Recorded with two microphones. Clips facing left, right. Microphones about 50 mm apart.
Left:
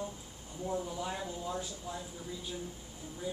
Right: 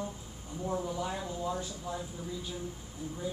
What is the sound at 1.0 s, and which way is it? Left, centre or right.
Speech, centre.